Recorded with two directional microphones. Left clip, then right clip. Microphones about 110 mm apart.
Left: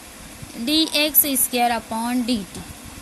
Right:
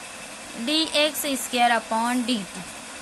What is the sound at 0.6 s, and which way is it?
Speech, 55° left (ahead or behind).